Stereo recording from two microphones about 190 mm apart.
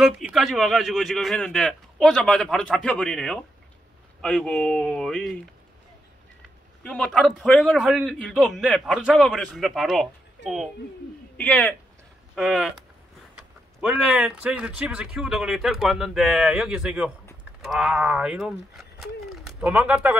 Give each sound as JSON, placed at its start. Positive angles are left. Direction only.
{"t": 0.0, "sound": "speech", "side_deg": 0}
{"t": 6.8, "sound": "speech", "side_deg": 5}
{"t": 10.4, "sound": "speech", "side_deg": 65}
{"t": 11.3, "sound": "speech", "side_deg": 5}
{"t": 13.7, "sound": "speech", "side_deg": -5}
{"t": 19.2, "sound": "a sound", "side_deg": -5}